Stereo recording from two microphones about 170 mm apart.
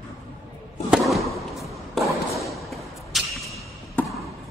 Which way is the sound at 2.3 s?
Centre (ahead or behind).